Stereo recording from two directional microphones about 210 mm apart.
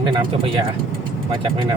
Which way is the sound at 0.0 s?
20° right (ahead or behind).